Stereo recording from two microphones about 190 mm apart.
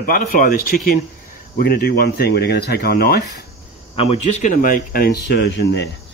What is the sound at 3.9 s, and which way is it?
Speech, 30° left (ahead or behind).